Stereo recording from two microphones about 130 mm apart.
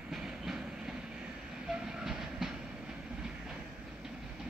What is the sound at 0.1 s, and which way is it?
Train, 5° right (ahead or behind).